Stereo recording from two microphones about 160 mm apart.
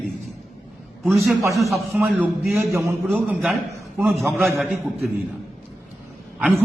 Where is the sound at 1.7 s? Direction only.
10° right (ahead or behind).